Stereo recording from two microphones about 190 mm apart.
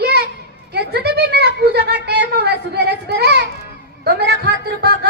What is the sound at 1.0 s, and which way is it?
Speech, 55° right (ahead or behind).